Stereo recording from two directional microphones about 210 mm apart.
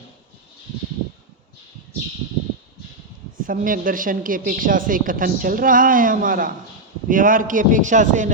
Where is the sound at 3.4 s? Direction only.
40° right (ahead or behind).